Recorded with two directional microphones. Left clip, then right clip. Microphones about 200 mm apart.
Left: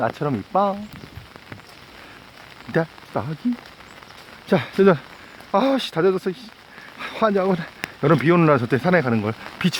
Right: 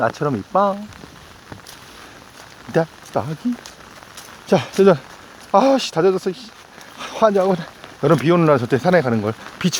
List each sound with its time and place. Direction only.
0.2 s speech: 10° left (ahead or behind)
2.7 s speech: 15° left (ahead or behind)
4.4 s speech: 15° left (ahead or behind)